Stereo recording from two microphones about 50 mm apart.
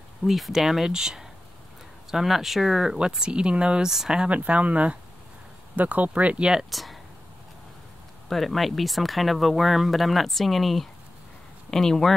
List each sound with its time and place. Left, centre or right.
0.2 s speech: centre
4.3 s speech: right
6.7 s speech: centre
8.3 s speech: centre